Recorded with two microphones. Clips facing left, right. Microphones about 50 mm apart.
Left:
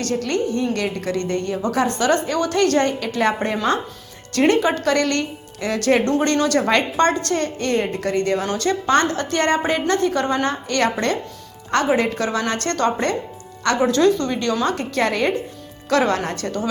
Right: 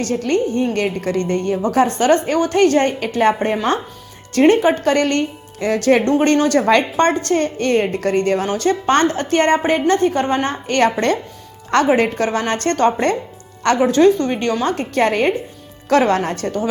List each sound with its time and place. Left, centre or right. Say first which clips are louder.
0.0 s a woman's voice: right 3 dB; right